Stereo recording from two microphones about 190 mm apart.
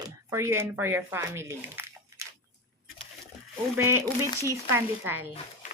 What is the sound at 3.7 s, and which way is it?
Speech, 15° right (ahead or behind).